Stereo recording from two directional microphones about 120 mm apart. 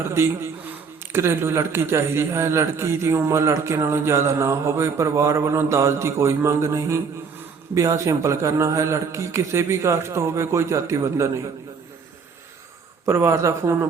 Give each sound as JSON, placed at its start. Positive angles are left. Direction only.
{"t": 0.0, "sound": "a man's voice", "side_deg": -20}
{"t": 13.1, "sound": "a man's voice", "side_deg": -25}